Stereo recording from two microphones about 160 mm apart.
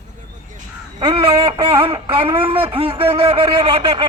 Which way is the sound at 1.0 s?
30° right (ahead or behind).